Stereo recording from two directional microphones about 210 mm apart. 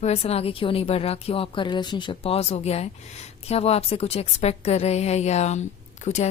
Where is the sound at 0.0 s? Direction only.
30° left (ahead or behind).